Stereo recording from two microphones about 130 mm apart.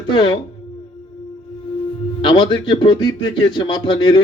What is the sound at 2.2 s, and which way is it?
Speech, 35° left (ahead or behind).